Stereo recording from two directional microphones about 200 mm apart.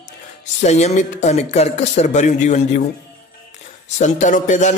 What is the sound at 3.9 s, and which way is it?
Speech, 40° left (ahead or behind).